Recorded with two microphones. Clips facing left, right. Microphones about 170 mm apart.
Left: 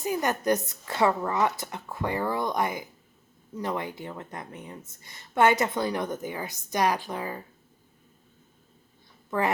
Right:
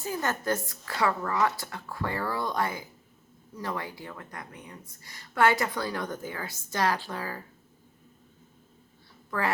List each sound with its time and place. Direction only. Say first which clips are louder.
0.0 s a woman's voice: left 4 dB; 15° left (ahead or behind)